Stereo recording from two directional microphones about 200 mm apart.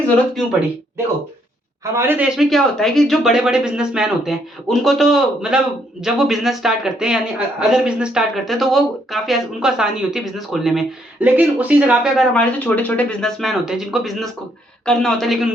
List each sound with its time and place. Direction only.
1.8 s speech: 10° right (ahead or behind)